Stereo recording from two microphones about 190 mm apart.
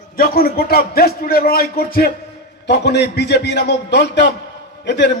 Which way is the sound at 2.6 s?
65° left (ahead or behind).